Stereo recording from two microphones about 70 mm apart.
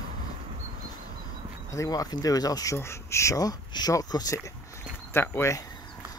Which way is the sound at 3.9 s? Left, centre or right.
Left.